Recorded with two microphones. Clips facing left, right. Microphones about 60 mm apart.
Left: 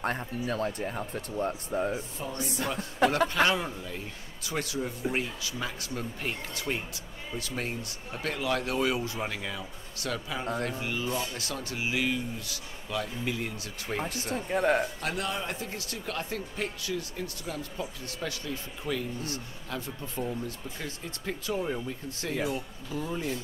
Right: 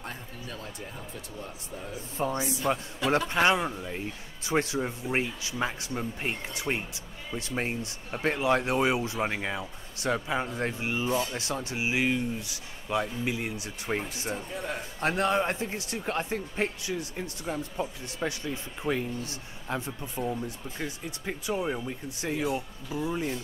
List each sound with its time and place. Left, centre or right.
0.0 s speech: left
2.2 s speech: right
2.7 s a man's voice: right
14.3 s a man's voice: left
15.0 s a man's voice: right; by 23.3 s centre